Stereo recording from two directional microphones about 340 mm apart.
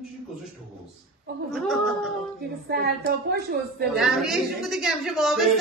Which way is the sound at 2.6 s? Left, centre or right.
Right.